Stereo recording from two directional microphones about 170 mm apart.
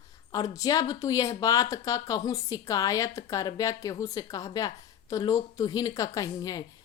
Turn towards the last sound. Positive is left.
turn(degrees=20)  # may be behind; listen again after turning